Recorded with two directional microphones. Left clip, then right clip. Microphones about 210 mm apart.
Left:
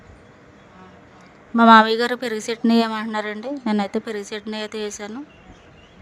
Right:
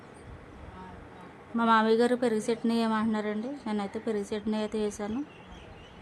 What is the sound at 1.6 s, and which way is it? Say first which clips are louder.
A woman's voice: left 11 dB; 35° left (ahead or behind).